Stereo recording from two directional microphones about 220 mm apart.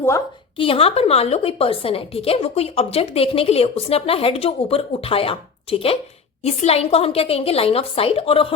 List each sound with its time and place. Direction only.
0.5 s a woman's voice: 25° left (ahead or behind)